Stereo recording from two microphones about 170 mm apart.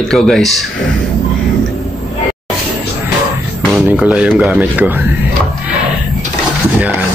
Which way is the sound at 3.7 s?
10° right (ahead or behind).